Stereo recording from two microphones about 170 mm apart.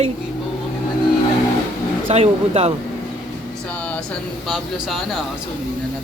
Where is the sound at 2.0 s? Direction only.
35° right (ahead or behind).